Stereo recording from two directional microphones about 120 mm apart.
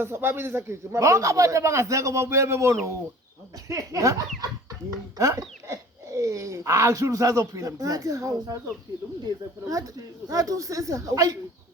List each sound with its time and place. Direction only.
0.0 s a man's voice: 20° right (ahead or behind)